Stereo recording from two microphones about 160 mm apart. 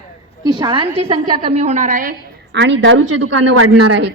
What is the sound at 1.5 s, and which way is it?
A woman's voice, 45° right (ahead or behind).